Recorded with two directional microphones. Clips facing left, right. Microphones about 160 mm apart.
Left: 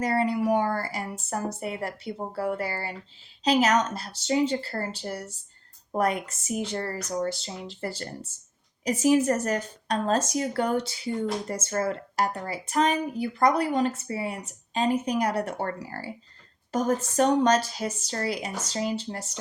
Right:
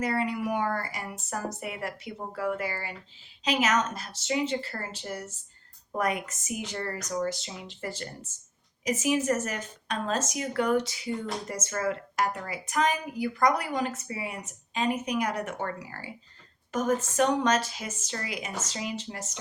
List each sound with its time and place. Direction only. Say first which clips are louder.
0.0 s a woman's voice: left 4 dB; 35° left (ahead or behind)